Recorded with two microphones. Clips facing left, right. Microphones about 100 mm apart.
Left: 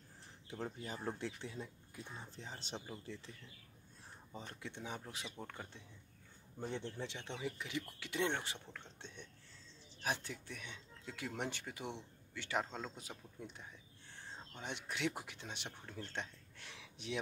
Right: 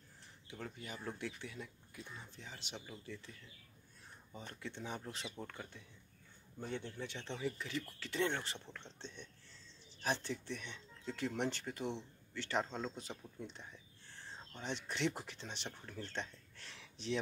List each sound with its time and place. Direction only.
0.5 s speech: 30° left (ahead or behind)
4.3 s speech: 25° left (ahead or behind)
6.6 s speech: 30° left (ahead or behind)
7.2 s speech: 15° left (ahead or behind)